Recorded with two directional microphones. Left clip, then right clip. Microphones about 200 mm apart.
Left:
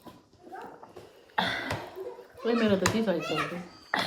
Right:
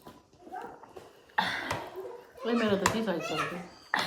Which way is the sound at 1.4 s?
10° left (ahead or behind).